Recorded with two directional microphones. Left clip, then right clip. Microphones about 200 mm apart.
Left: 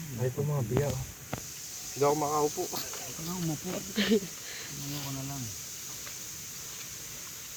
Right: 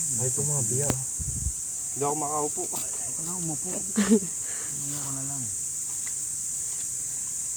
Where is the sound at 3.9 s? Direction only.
45° right (ahead or behind).